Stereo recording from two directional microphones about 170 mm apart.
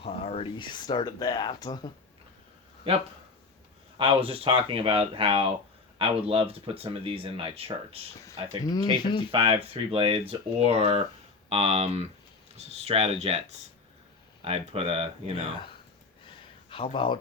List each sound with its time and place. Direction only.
0.0 s speech: 35° left (ahead or behind)
3.9 s speech: 30° right (ahead or behind)
8.6 s speech: 25° left (ahead or behind)
9.3 s speech: 35° right (ahead or behind)
14.4 s speech: 35° right (ahead or behind)
16.2 s a sound: 30° left (ahead or behind)